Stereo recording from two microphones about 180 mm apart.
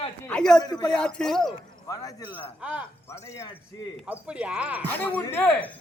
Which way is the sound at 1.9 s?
20° left (ahead or behind).